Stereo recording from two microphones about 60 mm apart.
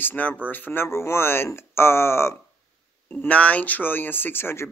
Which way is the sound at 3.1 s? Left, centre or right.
Left.